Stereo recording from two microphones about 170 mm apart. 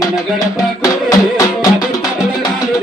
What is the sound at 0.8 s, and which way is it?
Music, 20° left (ahead or behind).